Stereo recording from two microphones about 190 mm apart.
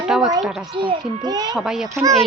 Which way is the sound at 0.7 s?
25° right (ahead or behind).